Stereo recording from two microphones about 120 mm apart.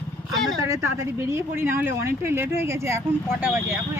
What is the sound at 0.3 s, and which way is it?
Speech, centre (ahead or behind).